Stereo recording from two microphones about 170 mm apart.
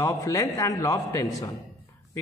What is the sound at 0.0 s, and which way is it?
A man's voice, 20° left (ahead or behind).